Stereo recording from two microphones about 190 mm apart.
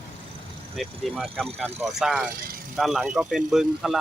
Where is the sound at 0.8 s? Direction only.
Centre (ahead or behind).